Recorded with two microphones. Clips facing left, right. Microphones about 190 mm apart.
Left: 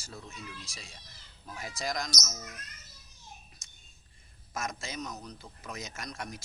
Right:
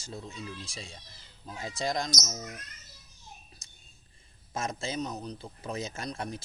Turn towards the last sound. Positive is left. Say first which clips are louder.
# right 5 dB
turn(degrees=-30)  # may be behind; listen again after turning